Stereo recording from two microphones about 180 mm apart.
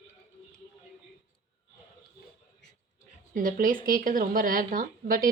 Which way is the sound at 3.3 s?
50° right (ahead or behind).